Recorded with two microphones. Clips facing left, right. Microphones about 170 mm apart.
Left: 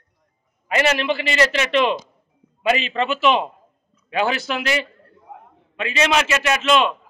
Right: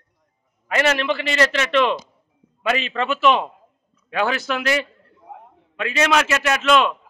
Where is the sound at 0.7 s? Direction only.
10° left (ahead or behind).